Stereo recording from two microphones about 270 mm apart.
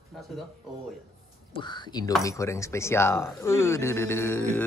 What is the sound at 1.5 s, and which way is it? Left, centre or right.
Speech, centre.